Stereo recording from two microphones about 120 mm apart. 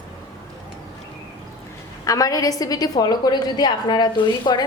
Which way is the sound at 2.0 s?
30° left (ahead or behind).